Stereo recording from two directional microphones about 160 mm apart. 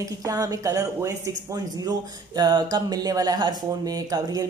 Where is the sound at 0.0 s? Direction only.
20° right (ahead or behind).